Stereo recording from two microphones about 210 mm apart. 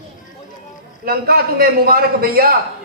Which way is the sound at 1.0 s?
45° right (ahead or behind).